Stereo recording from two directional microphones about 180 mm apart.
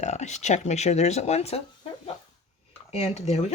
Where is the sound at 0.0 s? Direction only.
40° left (ahead or behind).